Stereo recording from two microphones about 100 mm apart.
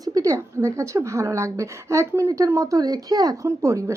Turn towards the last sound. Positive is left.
turn(degrees=-30)  # may be behind; listen again after turning